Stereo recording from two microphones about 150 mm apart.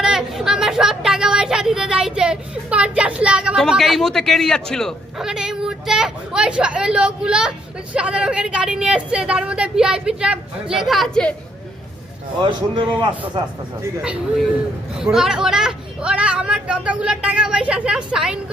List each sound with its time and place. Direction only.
0.0 s a sound: 5° right (ahead or behind)
3.6 s a man's voice: centre (ahead or behind)
12.4 s a man's voice: 30° right (ahead or behind)
14.0 s a man's voice: 5° right (ahead or behind)